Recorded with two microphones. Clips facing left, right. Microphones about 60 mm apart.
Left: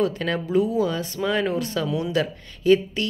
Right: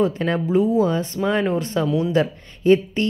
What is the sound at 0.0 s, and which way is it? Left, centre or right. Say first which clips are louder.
Speech: right 3 dB; right.